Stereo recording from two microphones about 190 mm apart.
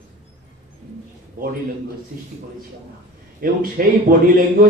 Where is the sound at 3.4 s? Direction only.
45° right (ahead or behind).